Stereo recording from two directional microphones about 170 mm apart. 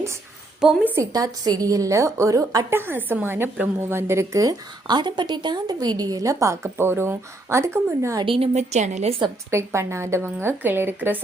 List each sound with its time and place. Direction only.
0.6 s a woman's voice: 5° right (ahead or behind)
0.9 s a woman's voice: 20° right (ahead or behind)
8.2 s a woman's voice: 35° right (ahead or behind)
9.5 s a woman's voice: 15° right (ahead or behind)